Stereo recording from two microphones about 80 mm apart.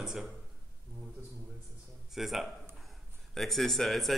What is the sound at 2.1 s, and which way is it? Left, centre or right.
Speech, centre.